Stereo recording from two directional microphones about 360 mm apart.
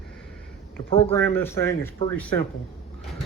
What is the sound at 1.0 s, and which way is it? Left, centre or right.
A man's voice, centre.